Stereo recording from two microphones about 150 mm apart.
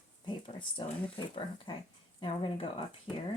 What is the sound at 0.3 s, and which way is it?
Speech, 35° left (ahead or behind).